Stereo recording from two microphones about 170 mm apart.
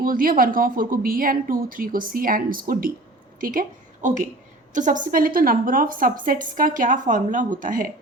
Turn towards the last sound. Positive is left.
turn(degrees=-50)  # may be behind; listen again after turning